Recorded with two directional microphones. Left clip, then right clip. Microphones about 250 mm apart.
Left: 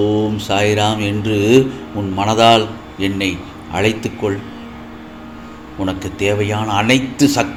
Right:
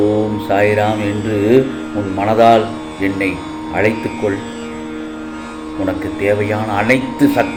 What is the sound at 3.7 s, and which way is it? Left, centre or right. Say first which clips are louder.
Speech: right 2 dB; left.